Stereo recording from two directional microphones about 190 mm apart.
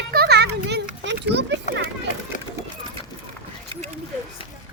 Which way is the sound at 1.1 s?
65° right (ahead or behind).